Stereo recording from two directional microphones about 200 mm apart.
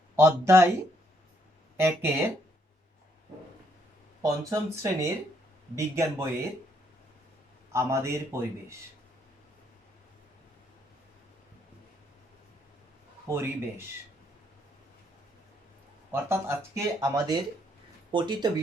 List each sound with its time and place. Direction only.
0.2 s speech: 15° right (ahead or behind)
1.7 s speech: 10° right (ahead or behind)
4.2 s speech: 15° right (ahead or behind)
7.7 s speech: 15° right (ahead or behind)
13.2 s speech: 10° right (ahead or behind)
16.1 s speech: 15° right (ahead or behind)